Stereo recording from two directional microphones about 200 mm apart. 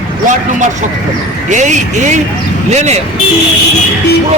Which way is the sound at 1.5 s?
35° right (ahead or behind).